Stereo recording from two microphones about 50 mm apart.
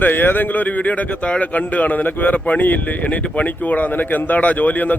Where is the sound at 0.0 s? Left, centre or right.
Left.